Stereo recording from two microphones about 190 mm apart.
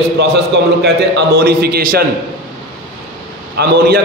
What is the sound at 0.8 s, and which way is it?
A man's voice, 55° right (ahead or behind).